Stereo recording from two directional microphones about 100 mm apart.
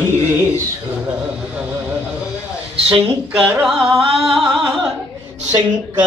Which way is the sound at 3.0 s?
10° right (ahead or behind).